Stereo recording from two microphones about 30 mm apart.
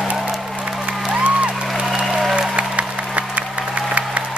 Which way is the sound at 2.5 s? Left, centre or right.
Right.